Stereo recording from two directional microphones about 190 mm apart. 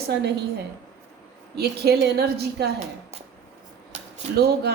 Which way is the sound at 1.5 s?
60° right (ahead or behind).